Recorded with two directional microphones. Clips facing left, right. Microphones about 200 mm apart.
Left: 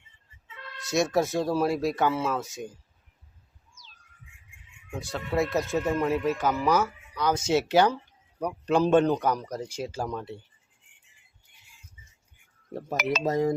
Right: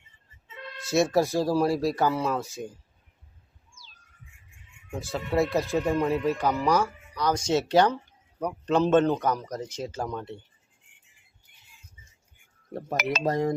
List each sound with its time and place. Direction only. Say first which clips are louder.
0.4 s a sound: right 4 dB; 20° right (ahead or behind)
0.8 s speech: right 2 dB; centre (ahead or behind)
4.9 s speech: right 2 dB; centre (ahead or behind)
12.7 s speech: even; centre (ahead or behind)